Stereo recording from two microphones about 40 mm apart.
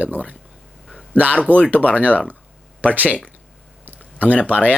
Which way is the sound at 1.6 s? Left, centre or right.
Left.